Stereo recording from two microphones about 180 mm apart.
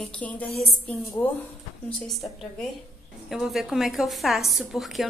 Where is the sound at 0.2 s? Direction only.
5° left (ahead or behind).